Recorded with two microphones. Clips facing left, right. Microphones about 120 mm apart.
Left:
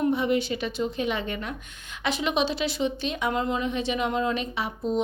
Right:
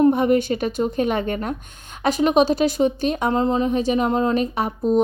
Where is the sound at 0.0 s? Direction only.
50° right (ahead or behind).